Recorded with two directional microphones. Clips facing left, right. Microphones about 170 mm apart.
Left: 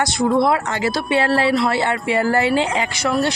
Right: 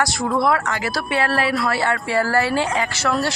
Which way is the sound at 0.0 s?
20° left (ahead or behind).